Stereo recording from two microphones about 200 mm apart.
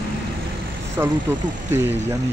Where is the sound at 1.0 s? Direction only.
15° right (ahead or behind).